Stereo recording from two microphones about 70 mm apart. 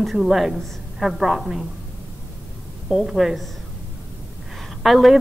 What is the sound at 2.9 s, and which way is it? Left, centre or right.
Speech, centre.